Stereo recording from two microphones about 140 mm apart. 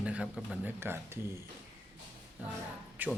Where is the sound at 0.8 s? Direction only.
15° right (ahead or behind).